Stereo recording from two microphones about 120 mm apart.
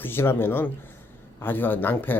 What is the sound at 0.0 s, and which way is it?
Speech, 20° left (ahead or behind).